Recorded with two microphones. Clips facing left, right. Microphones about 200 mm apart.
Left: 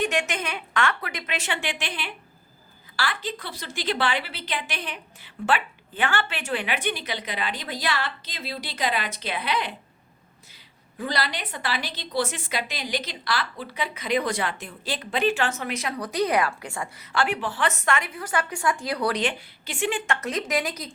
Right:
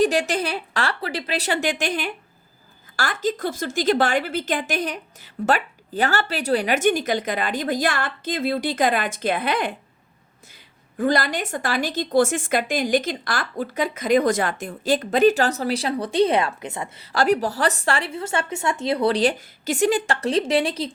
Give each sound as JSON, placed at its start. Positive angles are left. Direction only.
{"t": 0.0, "sound": "a woman's voice", "side_deg": -35}
{"t": 10.9, "sound": "a woman's voice", "side_deg": -50}
{"t": 17.1, "sound": "speech", "side_deg": -40}
{"t": 19.2, "sound": "speech", "side_deg": -40}